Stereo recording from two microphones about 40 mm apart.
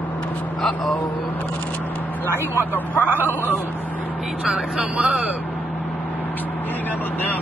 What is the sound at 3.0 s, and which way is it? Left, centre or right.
Speech, right.